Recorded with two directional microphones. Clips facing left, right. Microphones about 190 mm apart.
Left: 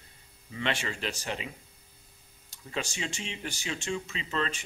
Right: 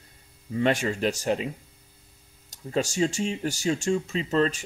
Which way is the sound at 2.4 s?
40° right (ahead or behind).